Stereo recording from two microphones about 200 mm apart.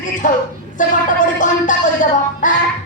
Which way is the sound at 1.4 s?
40° left (ahead or behind).